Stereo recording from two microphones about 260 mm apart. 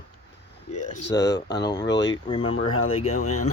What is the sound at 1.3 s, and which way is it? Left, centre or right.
Speech, centre.